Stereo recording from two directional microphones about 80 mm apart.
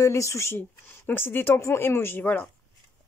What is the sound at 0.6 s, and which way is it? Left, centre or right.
Speech, left.